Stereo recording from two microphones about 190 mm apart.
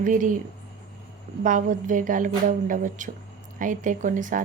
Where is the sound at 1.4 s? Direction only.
45° right (ahead or behind).